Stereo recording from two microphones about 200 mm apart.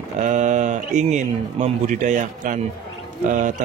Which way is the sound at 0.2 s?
40° right (ahead or behind).